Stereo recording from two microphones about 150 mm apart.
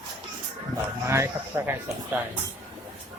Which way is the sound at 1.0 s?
20° right (ahead or behind).